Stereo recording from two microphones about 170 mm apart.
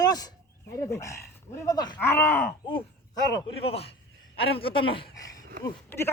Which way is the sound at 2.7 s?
25° left (ahead or behind).